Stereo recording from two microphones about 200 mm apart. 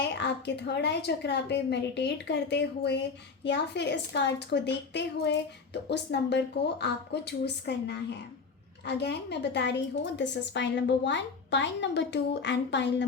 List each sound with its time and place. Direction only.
0.0 s a woman's voice: 60° left (ahead or behind)